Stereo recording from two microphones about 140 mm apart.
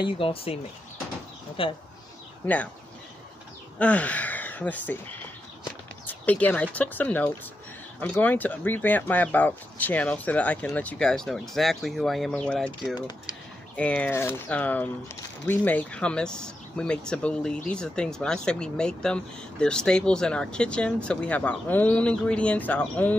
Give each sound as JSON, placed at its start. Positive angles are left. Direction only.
{"t": 0.0, "sound": "speech", "side_deg": 40}
{"t": 1.6, "sound": "speech", "side_deg": 40}
{"t": 2.4, "sound": "speech", "side_deg": 10}
{"t": 3.7, "sound": "speech", "side_deg": 10}
{"t": 12.9, "sound": "speech", "side_deg": 30}
{"t": 13.7, "sound": "speech", "side_deg": 10}